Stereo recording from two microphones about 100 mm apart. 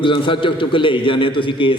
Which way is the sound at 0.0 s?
55° left (ahead or behind).